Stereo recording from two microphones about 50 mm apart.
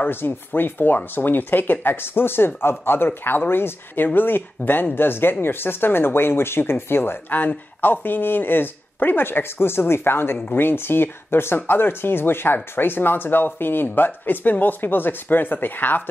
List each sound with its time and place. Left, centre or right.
0.0 s speech: left
7.2 s speech: left